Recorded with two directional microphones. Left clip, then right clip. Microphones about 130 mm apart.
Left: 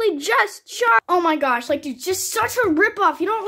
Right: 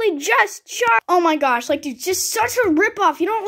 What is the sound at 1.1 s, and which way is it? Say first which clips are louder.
Speech: right 2 dB; 30° right (ahead or behind).